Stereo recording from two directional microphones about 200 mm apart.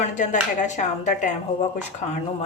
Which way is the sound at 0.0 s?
40° left (ahead or behind).